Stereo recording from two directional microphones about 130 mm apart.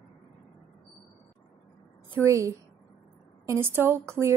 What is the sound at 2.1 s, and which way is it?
A woman's voice, 25° right (ahead or behind).